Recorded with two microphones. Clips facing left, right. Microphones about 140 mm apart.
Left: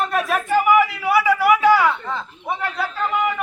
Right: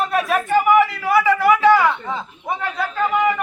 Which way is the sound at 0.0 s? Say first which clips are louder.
Right 2 dB; centre (ahead or behind).